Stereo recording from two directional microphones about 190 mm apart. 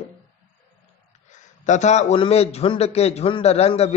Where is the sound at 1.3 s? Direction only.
40° left (ahead or behind).